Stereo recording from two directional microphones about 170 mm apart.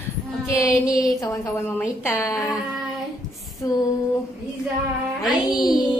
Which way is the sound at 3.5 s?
20° left (ahead or behind).